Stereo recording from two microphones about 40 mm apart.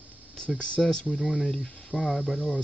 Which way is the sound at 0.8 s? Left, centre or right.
Left.